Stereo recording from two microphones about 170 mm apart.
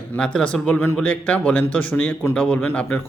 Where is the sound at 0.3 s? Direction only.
5° left (ahead or behind).